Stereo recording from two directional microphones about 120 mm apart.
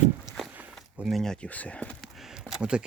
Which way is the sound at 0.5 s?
15° right (ahead or behind).